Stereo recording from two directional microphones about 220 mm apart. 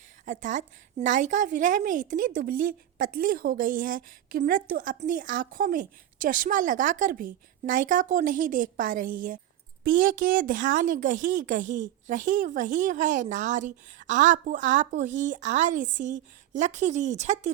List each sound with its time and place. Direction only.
0.3 s a woman's voice: 35° right (ahead or behind)